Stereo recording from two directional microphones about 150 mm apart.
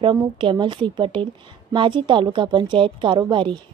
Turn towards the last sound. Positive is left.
turn(degrees=-30)  # may be behind; listen again after turning